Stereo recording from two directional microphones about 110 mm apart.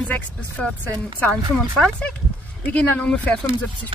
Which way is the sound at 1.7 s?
5° left (ahead or behind).